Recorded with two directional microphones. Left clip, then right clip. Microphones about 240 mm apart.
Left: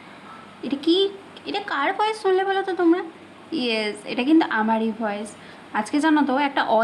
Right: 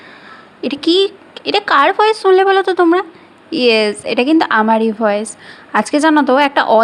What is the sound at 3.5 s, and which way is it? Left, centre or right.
A woman's voice, right.